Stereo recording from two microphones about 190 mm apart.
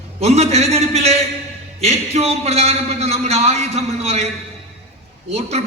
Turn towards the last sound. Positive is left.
turn(degrees=-35)  # may be behind; listen again after turning